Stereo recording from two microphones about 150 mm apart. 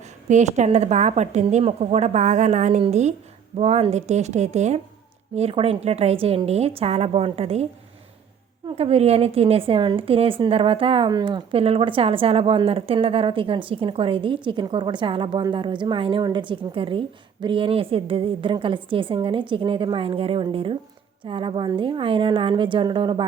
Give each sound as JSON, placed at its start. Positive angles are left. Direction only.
{"t": 0.3, "sound": "a woman's voice", "side_deg": -50}